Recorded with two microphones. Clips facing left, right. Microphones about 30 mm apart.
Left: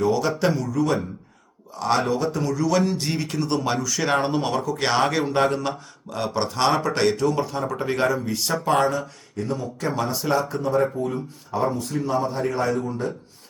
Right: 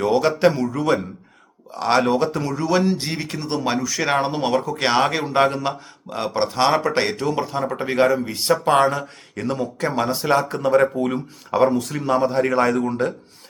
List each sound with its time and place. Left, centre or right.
0.0 s speech: right
9.3 s speech: right
9.7 s speech: right
10.6 s speech: right